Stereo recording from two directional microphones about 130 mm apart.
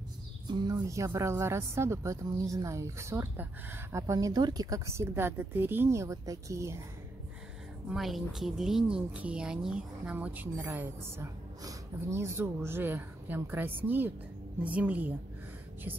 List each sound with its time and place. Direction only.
0.5 s a sound: 35° right (ahead or behind)
0.8 s a woman's voice: 25° right (ahead or behind)
7.9 s a woman's voice: centre (ahead or behind)